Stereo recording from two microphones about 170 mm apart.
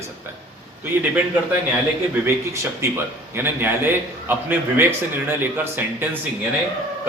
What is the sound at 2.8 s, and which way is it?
Speech, 15° right (ahead or behind).